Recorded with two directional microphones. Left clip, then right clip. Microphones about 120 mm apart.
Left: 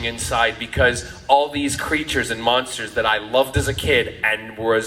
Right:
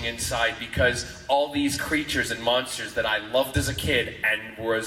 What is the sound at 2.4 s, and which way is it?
A man's voice, 50° left (ahead or behind).